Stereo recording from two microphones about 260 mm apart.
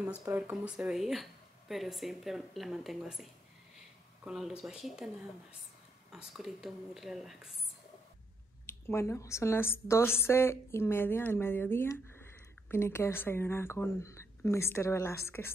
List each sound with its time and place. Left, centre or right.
0.2 s speech: centre
6.1 s speech: centre
8.6 s a woman's voice: centre